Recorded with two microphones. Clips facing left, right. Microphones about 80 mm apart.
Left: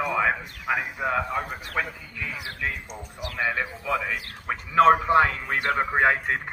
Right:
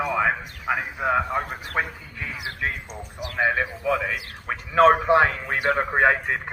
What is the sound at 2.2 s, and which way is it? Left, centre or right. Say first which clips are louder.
A man's voice: right 2 dB; centre.